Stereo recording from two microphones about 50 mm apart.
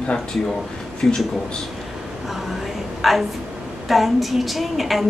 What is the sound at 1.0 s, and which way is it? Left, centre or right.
Speech, centre.